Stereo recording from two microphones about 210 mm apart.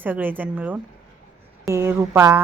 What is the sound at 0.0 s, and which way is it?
A woman's voice, 10° right (ahead or behind).